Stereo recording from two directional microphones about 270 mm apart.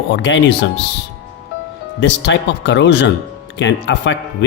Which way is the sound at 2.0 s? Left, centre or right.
Left.